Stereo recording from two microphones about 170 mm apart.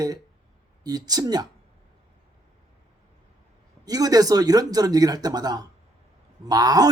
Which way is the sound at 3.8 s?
20° right (ahead or behind).